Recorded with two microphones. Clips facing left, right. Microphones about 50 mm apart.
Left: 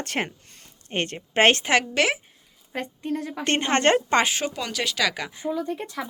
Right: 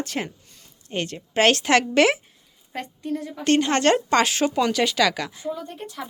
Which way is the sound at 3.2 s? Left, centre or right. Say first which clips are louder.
Left 1 dB; left.